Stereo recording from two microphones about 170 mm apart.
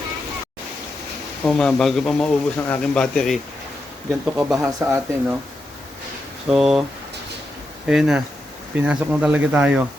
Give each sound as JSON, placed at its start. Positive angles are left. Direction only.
{"t": 1.5, "sound": "speech", "side_deg": 5}
{"t": 4.4, "sound": "speech", "side_deg": -10}
{"t": 6.5, "sound": "speech", "side_deg": -5}
{"t": 7.9, "sound": "speech", "side_deg": -5}